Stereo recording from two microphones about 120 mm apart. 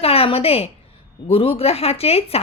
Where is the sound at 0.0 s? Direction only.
55° left (ahead or behind).